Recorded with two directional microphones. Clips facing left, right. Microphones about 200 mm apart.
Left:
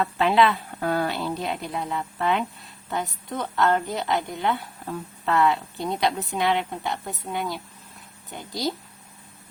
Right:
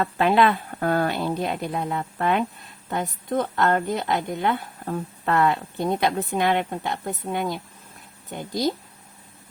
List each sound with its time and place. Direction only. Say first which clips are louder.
0.0 s a woman's voice: right 1 dB; 50° right (ahead or behind)